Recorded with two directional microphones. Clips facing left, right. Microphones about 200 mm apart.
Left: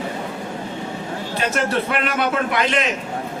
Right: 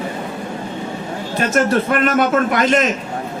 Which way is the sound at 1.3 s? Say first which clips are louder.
Right 5 dB; 45° right (ahead or behind).